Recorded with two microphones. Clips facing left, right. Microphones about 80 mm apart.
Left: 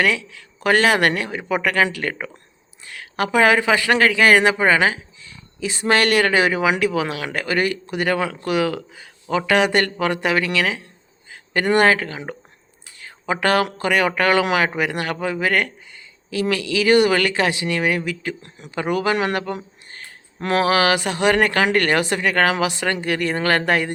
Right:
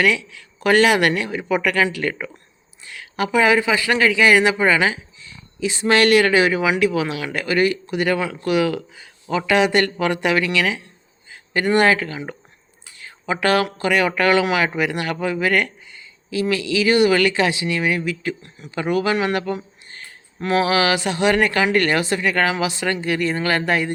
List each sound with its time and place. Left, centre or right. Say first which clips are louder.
0.0 s speech: right 1 dB; left
11.3 s speech: even; left
20.4 s speech: even; left